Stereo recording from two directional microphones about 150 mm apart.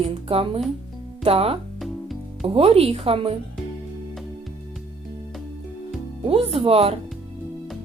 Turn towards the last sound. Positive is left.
turn(degrees=-40)  # may be behind; listen again after turning